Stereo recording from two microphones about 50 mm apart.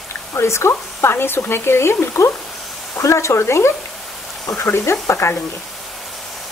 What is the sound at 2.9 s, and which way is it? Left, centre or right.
Speech, left.